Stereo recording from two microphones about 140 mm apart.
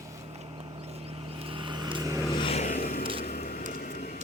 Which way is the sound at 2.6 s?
90° left.